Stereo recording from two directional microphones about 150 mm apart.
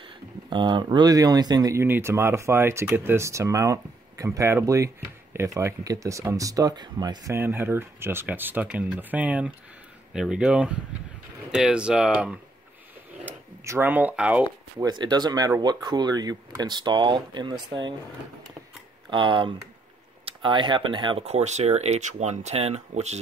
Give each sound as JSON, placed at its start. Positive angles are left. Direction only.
{"t": 0.0, "sound": "speech", "side_deg": -30}
{"t": 14.8, "sound": "speech", "side_deg": -30}
{"t": 19.0, "sound": "speech", "side_deg": -30}
{"t": 21.2, "sound": "speech", "side_deg": -45}